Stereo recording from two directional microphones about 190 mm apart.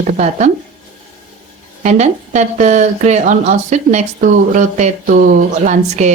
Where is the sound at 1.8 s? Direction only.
40° right (ahead or behind).